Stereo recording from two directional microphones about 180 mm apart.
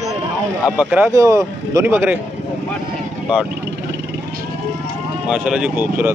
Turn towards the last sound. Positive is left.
turn(degrees=-10)  # may be behind; listen again after turning